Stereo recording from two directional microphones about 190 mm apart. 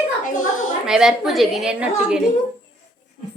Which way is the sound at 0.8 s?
5° right (ahead or behind).